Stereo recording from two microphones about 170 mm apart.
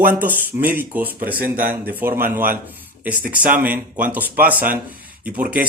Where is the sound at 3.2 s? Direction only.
55° right (ahead or behind).